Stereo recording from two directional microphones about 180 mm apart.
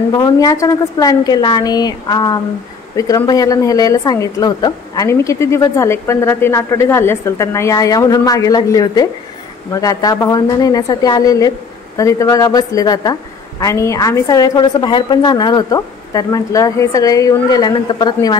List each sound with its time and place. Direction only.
0.1 s a woman's voice: 20° left (ahead or behind)